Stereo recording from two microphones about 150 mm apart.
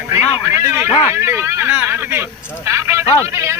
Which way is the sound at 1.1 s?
15° right (ahead or behind).